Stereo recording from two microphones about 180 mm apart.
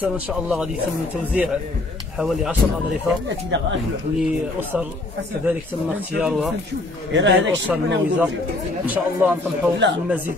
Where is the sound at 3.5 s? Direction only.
85° right.